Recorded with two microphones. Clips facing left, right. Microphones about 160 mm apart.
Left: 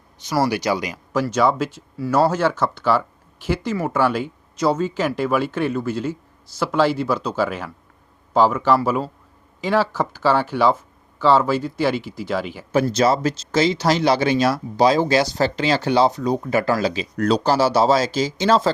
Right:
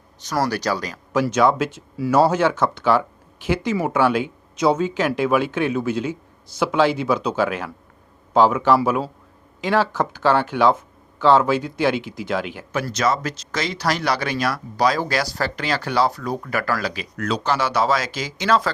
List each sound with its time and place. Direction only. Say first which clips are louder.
0.3 s a man's voice: left 2 dB; 10° left (ahead or behind)
9.6 s speech: even; 5° left (ahead or behind)
12.7 s speech: left 5 dB; 30° left (ahead or behind)